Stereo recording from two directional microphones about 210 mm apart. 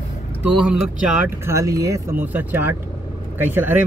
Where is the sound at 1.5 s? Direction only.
15° right (ahead or behind).